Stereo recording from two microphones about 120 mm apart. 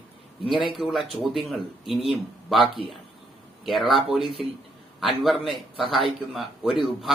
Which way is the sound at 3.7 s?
Centre (ahead or behind).